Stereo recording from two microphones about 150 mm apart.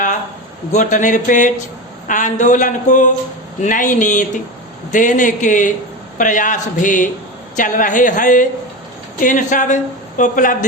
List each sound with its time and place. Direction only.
0.7 s speech: 55° left (ahead or behind)